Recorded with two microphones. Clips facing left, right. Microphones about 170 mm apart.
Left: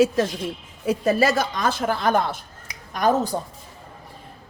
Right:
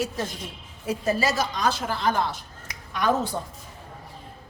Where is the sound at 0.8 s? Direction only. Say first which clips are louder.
Left 5 dB; 65° left (ahead or behind).